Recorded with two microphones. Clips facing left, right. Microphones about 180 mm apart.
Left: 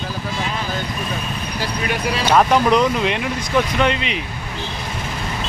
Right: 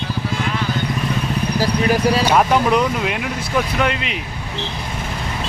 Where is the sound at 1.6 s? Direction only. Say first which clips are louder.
Right 6 dB; 35° right (ahead or behind).